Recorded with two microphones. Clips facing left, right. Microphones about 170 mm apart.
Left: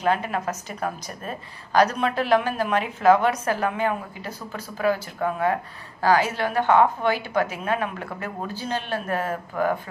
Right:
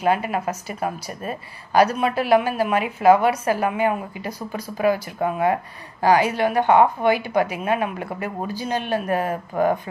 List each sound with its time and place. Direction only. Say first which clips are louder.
0.0 s a woman's voice: right 2 dB; 10° right (ahead or behind)
9.3 s speech: right 4 dB; 30° right (ahead or behind)